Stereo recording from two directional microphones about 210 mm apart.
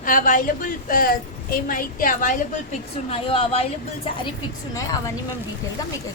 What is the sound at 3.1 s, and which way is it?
Speech, 25° left (ahead or behind).